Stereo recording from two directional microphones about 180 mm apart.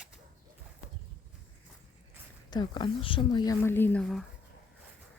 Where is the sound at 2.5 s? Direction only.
25° left (ahead or behind); by 4.2 s 5° left (ahead or behind).